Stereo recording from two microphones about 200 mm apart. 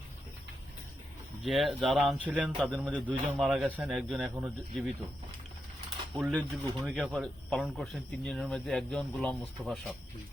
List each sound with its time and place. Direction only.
1.5 s speech: centre (ahead or behind)
4.4 s speech: 10° right (ahead or behind)
6.1 s speech: 5° right (ahead or behind)